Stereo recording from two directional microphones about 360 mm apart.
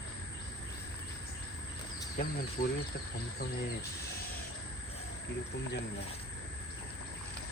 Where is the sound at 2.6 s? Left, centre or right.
Left.